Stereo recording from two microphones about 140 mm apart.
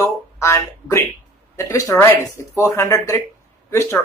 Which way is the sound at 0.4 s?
20° left (ahead or behind).